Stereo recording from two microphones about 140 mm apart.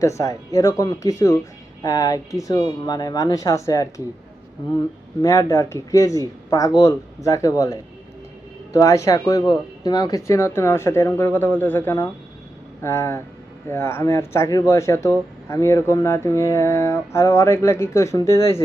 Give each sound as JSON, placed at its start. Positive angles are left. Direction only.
{"t": 0.0, "sound": "speech", "side_deg": 20}
{"t": 5.2, "sound": "speech", "side_deg": 20}